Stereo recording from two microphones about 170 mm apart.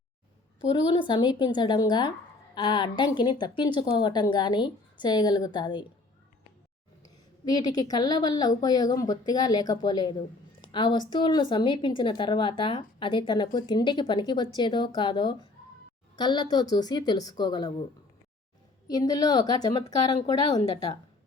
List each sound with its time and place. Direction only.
0.7 s speech: 30° left (ahead or behind)
7.4 s speech: 25° left (ahead or behind)
18.9 s speech: 25° left (ahead or behind)